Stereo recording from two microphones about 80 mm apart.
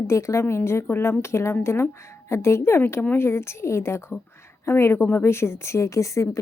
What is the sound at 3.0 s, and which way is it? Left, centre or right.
Speech, centre.